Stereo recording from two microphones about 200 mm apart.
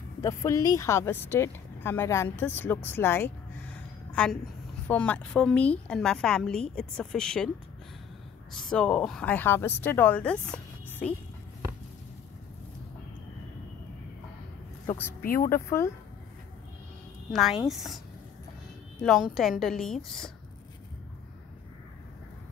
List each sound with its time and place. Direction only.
0.2 s speech: 15° left (ahead or behind)
3.7 s a sound: 5° left (ahead or behind)
4.8 s a woman's voice: 5° left (ahead or behind)
8.6 s speech: 5° left (ahead or behind)
15.2 s speech: 45° left (ahead or behind)
15.5 s speech: 15° left (ahead or behind)
17.3 s a woman's voice: centre (ahead or behind)
19.0 s a woman's voice: centre (ahead or behind)